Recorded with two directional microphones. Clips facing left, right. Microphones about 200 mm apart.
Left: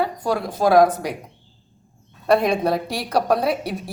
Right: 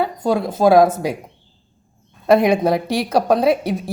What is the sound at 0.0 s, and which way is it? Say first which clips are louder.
Speech: right 4 dB; 25° right (ahead or behind).